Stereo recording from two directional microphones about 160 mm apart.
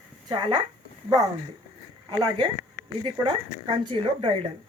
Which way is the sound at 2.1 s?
30° right (ahead or behind).